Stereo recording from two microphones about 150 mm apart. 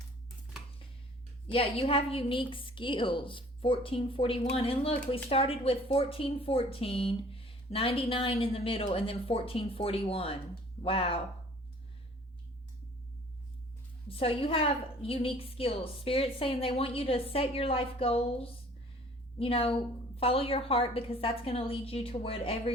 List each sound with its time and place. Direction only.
1.5 s a woman's voice: 40° left (ahead or behind)
14.1 s a woman's voice: 40° left (ahead or behind)